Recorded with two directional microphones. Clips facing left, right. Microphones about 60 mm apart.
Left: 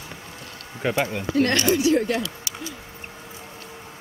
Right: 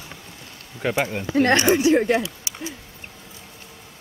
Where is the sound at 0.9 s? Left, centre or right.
Centre.